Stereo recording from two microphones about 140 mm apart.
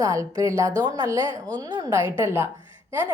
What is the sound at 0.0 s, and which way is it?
A woman's voice, 25° right (ahead or behind).